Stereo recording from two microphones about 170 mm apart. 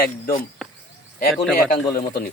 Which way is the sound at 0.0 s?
55° left (ahead or behind).